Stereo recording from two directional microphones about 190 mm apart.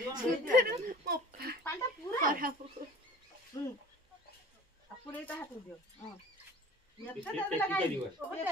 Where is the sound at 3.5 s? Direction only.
20° left (ahead or behind).